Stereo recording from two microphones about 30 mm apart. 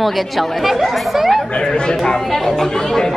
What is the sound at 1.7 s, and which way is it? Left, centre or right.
Speech, left.